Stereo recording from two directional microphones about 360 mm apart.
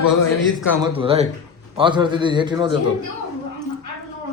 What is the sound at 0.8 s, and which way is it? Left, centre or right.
A man's voice, centre.